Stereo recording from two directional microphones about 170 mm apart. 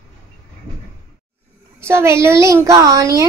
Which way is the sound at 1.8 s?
15° right (ahead or behind).